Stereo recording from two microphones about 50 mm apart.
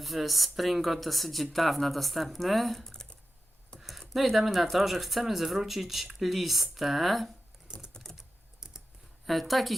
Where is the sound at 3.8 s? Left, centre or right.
Centre.